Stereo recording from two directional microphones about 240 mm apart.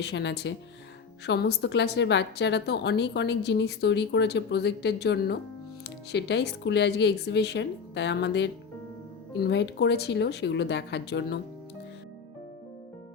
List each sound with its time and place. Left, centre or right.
0.0 s a woman's voice: left